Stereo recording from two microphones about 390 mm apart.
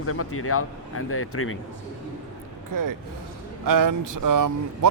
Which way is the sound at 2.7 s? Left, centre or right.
Right.